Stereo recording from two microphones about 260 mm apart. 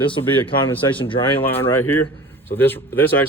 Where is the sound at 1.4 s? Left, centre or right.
Centre.